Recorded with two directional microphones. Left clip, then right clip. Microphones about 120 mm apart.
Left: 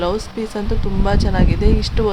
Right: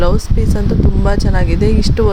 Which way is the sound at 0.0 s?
25° right (ahead or behind).